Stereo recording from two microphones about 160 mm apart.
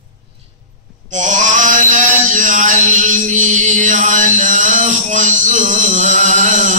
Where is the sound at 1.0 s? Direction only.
50° right (ahead or behind).